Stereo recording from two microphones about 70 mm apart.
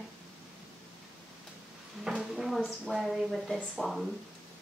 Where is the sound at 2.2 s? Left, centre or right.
Centre.